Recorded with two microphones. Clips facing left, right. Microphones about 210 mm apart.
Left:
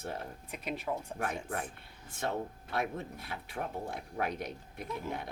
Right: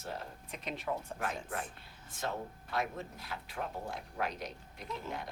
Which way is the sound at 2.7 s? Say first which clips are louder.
Left 2 dB; 55° left (ahead or behind).